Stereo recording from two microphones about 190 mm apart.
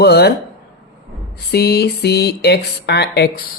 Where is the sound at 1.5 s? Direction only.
55° left (ahead or behind).